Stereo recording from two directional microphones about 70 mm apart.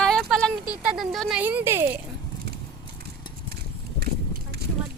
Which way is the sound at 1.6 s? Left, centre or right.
Right.